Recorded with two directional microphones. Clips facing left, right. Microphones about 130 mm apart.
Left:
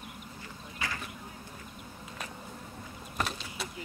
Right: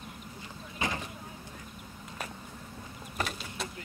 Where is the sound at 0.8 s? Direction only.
20° right (ahead or behind).